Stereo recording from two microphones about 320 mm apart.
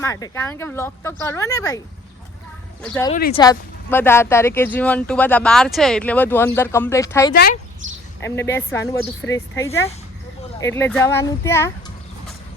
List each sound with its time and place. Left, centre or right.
0.0 s speech: centre
2.8 s speech: centre
3.1 s speech: left
3.3 s speech: centre
7.3 s speech: left
8.2 s speech: centre